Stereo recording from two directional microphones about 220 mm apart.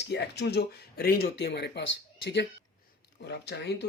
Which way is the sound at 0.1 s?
50° left (ahead or behind).